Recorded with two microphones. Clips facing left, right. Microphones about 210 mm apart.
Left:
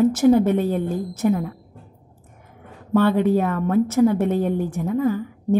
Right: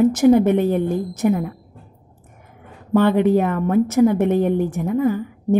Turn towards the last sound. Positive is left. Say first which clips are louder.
# right 2 dB
turn(degrees=-15)  # may be behind; listen again after turning